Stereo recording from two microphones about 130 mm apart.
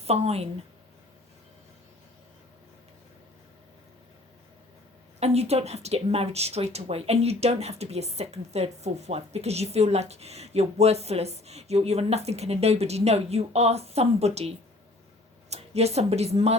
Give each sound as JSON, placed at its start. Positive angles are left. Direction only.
{"t": 0.0, "sound": "a woman's voice", "side_deg": -50}
{"t": 5.2, "sound": "a woman's voice", "side_deg": -55}